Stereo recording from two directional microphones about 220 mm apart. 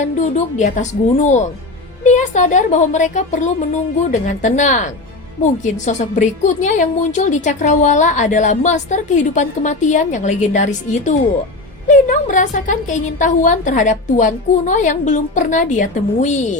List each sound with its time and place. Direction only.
0.0 s a woman's voice: 35° left (ahead or behind)